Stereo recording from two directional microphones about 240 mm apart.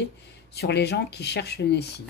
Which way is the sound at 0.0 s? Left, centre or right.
Left.